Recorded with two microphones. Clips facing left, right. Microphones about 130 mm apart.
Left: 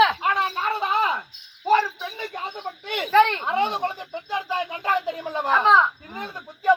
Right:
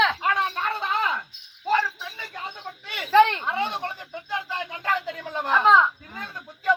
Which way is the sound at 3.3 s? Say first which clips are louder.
Left 4 dB; 20° left (ahead or behind).